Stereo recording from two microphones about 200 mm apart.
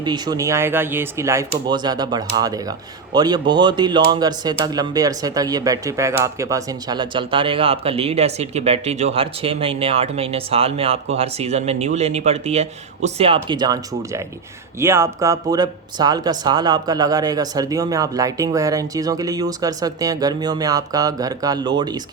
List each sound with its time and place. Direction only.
0.0 s speech: 20° right (ahead or behind)